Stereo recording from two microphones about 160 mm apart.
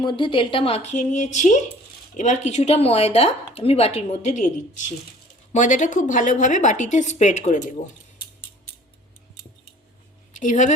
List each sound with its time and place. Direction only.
0.0 s a woman's voice: 30° left (ahead or behind); by 7.7 s 50° left (ahead or behind)
10.4 s a woman's voice: 50° left (ahead or behind)